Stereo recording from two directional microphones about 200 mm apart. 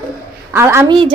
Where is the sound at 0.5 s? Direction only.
10° right (ahead or behind).